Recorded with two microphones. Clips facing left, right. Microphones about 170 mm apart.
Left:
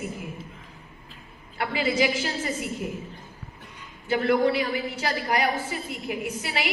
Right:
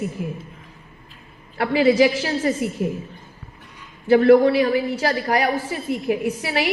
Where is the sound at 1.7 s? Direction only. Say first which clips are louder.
Right 9 dB; 35° right (ahead or behind).